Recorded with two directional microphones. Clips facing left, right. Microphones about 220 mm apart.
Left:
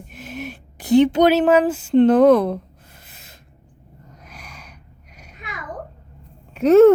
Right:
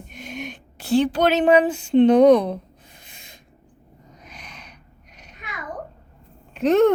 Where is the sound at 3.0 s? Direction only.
5° left (ahead or behind).